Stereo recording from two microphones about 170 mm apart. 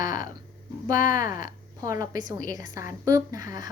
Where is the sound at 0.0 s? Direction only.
50° left (ahead or behind).